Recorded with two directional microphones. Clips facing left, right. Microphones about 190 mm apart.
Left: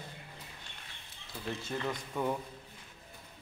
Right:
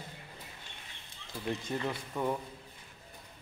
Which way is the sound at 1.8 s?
5° right (ahead or behind).